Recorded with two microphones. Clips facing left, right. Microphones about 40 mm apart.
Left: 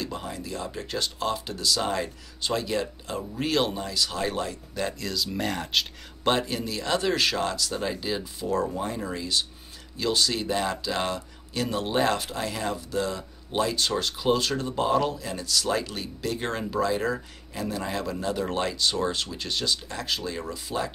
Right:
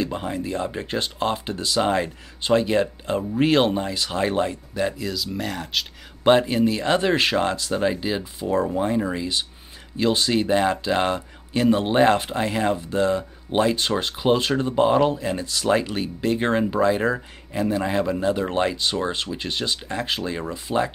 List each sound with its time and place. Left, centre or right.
0.0 s speech: right
4.7 s speech: centre
6.2 s speech: right